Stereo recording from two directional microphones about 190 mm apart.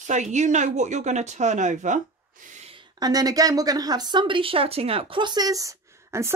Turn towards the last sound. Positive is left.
turn(degrees=-15)  # may be behind; listen again after turning